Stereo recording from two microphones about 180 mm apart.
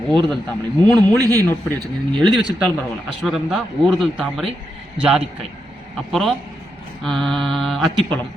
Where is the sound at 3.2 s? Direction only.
Centre (ahead or behind).